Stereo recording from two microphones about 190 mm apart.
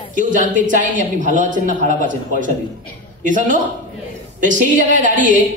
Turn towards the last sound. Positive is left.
turn(degrees=-45)  # may be behind; listen again after turning